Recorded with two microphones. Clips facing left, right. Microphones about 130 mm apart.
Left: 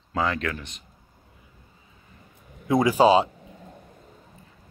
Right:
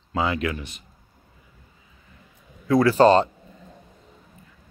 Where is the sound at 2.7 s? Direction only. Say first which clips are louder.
Right 2 dB; 15° left (ahead or behind).